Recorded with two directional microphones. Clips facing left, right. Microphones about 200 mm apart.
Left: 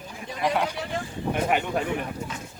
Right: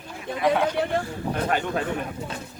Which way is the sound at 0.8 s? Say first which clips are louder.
Right 8 dB; 60° right (ahead or behind).